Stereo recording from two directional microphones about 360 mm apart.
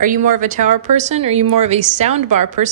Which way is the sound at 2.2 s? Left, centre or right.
Right.